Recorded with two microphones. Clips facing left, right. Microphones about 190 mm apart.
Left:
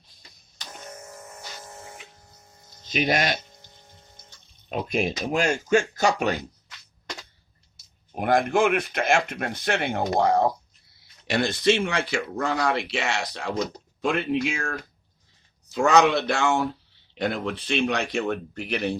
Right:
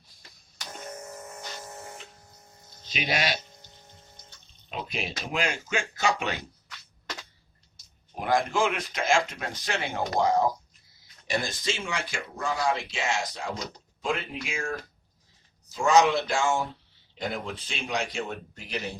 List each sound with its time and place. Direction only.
2.9 s speech: 50° left (ahead or behind)
4.7 s speech: 45° left (ahead or behind)
8.2 s speech: 60° left (ahead or behind)
15.7 s speech: 65° left (ahead or behind)